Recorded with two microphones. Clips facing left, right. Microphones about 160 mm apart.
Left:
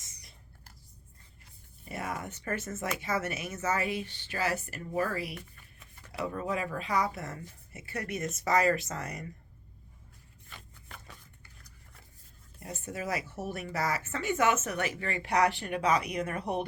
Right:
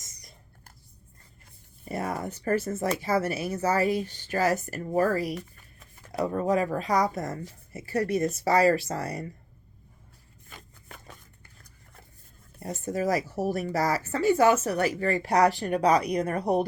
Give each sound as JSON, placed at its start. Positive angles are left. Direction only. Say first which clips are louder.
{"t": 0.0, "sound": "whispering", "louder": "right 4 dB", "side_deg": -40}
{"t": 1.8, "sound": "speech", "louder": "right 6 dB", "side_deg": -35}
{"t": 10.5, "sound": "a sound", "louder": "right 3 dB", "side_deg": -45}
{"t": 12.5, "sound": "speech", "louder": "right 9 dB", "side_deg": -40}